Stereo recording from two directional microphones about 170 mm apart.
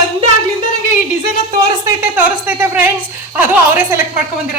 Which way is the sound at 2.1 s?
10° right (ahead or behind).